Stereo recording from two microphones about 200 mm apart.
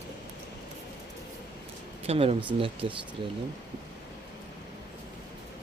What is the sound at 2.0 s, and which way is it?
Speech, 30° right (ahead or behind).